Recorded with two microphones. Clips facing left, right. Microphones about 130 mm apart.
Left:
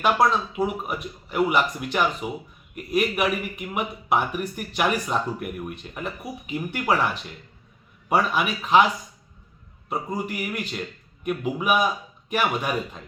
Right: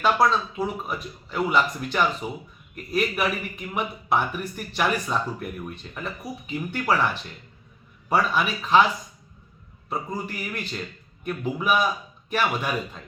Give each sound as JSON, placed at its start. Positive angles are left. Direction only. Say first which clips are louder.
{"t": 0.2, "sound": "speech", "louder": "left 1 dB", "side_deg": 10}
{"t": 8.1, "sound": "speech", "louder": "left 1 dB", "side_deg": 5}
{"t": 10.1, "sound": "speech", "louder": "left 3 dB", "side_deg": 10}